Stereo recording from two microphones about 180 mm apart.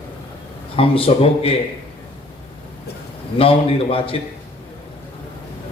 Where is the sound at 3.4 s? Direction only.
30° left (ahead or behind).